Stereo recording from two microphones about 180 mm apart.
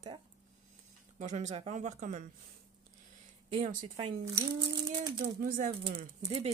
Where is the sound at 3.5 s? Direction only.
45° right (ahead or behind).